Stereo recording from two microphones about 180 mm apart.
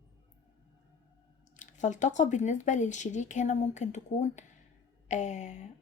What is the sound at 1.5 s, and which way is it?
A woman's voice, 40° left (ahead or behind).